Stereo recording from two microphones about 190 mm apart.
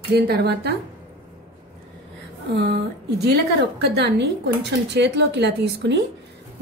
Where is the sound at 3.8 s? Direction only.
60° right (ahead or behind).